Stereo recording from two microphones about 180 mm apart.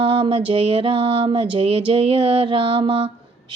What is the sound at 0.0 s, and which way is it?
Music, 30° right (ahead or behind).